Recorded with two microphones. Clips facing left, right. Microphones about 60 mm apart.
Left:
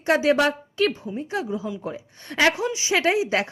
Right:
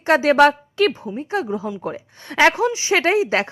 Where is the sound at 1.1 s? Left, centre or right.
Right.